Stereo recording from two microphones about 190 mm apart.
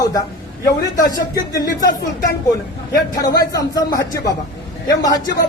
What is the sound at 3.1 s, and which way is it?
A man's voice, 20° left (ahead or behind).